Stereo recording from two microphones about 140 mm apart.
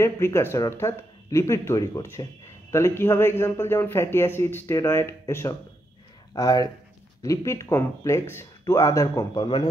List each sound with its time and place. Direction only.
0.0 s a man's voice: 20° left (ahead or behind)